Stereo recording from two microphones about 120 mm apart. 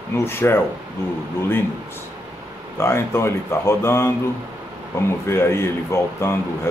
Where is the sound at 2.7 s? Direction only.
20° left (ahead or behind).